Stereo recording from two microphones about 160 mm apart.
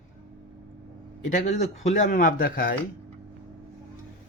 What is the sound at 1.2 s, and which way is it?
Speech, 50° left (ahead or behind).